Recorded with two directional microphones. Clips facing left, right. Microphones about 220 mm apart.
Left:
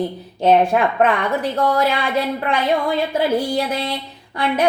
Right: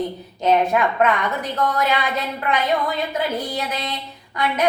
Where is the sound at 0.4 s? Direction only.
30° left (ahead or behind).